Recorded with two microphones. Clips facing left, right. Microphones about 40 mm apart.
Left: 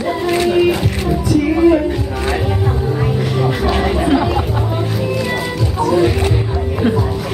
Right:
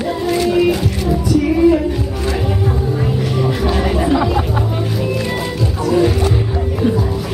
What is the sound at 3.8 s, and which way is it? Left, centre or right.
Chatter, centre.